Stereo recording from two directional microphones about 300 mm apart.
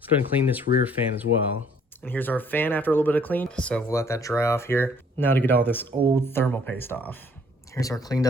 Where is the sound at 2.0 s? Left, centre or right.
Centre.